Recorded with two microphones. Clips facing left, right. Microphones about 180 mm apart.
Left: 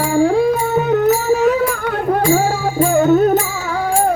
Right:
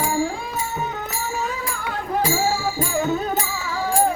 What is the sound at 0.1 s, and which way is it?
Music, 60° left (ahead or behind).